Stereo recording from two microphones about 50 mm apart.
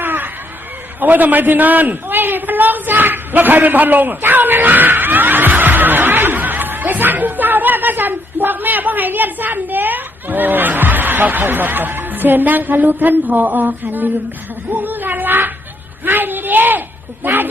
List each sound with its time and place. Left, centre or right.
0.0 s a sound: right
0.9 s a man's voice: right
14.7 s cat: right